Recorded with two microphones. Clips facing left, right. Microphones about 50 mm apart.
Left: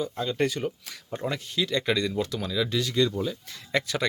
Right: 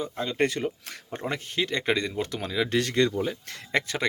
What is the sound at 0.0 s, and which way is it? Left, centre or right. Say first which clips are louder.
Speech: even; right.